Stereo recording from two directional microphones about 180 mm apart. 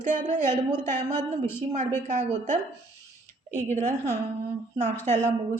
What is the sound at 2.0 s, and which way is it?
A woman's voice, 40° right (ahead or behind).